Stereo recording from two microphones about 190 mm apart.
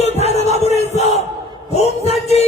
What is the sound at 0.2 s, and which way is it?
Music, 35° left (ahead or behind).